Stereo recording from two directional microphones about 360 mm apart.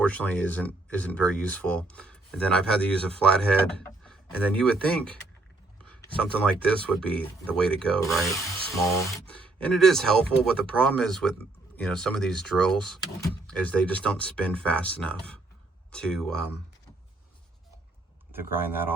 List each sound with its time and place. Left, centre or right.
0.0 s speech: centre
18.3 s speech: centre